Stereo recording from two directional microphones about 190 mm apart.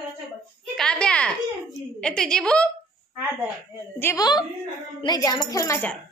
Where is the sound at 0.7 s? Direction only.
5° left (ahead or behind).